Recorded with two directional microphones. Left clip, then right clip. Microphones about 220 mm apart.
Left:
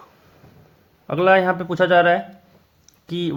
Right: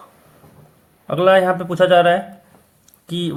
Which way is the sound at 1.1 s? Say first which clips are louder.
Right 2 dB; 25° left (ahead or behind).